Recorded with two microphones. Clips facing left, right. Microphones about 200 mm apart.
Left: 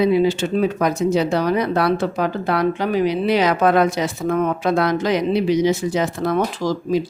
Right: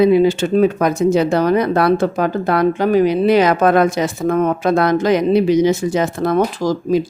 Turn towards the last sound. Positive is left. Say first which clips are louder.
# right 4 dB
turn(degrees=-45)  # may be behind; listen again after turning